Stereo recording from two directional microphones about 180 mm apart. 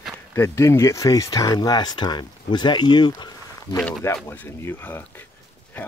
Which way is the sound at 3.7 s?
10° left (ahead or behind).